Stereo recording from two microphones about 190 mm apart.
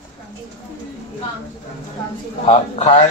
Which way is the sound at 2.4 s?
30° left (ahead or behind).